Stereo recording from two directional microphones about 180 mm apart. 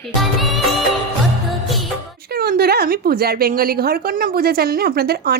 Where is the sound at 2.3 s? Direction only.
55° right (ahead or behind).